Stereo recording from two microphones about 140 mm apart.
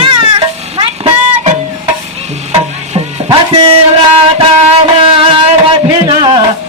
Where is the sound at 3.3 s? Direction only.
45° right (ahead or behind).